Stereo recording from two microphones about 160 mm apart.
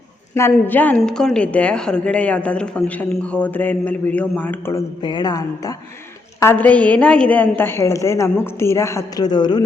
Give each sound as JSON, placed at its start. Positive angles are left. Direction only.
{"t": 0.3, "sound": "a woman's voice", "side_deg": 15}
{"t": 5.0, "sound": "speech", "side_deg": 25}
{"t": 6.4, "sound": "a woman's voice", "side_deg": 10}